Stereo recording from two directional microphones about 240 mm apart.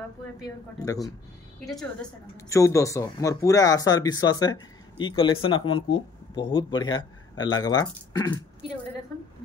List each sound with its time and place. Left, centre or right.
1.6 s a woman's voice: centre
2.5 s speech: centre